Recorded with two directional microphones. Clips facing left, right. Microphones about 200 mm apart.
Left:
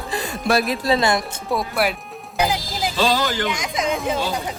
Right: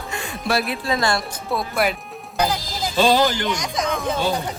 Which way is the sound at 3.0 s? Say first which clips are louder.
Right 4 dB; 20° right (ahead or behind).